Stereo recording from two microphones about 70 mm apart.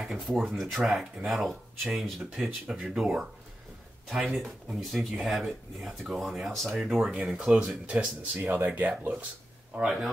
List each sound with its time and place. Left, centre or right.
0.0 s a sound: centre
0.6 s speech: centre
2.2 s speech: centre
8.4 s speech: right
9.8 s speech: centre